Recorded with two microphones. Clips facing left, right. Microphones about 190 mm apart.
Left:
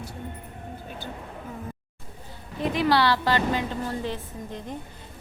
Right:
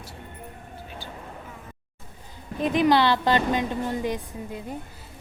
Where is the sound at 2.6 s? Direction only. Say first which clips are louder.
Right 2 dB; 20° right (ahead or behind).